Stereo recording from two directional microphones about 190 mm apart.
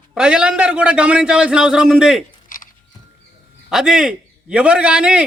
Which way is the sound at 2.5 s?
45° left (ahead or behind).